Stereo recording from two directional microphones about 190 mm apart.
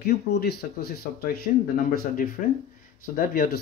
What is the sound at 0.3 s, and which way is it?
Speech, 55° left (ahead or behind).